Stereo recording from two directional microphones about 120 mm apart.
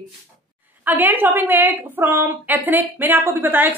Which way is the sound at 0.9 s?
15° right (ahead or behind).